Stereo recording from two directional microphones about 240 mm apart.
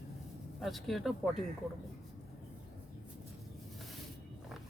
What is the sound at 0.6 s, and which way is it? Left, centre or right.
Speech, centre.